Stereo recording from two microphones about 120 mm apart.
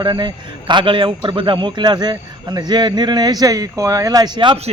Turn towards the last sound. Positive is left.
turn(degrees=-45)  # may be behind; listen again after turning